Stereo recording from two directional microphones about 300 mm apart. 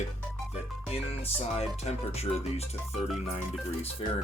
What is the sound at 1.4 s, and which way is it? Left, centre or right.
Speech, left.